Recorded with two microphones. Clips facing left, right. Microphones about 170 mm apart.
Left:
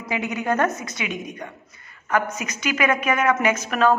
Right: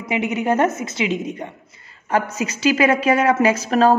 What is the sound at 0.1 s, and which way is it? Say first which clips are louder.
A woman's voice: right 4 dB; 20° right (ahead or behind).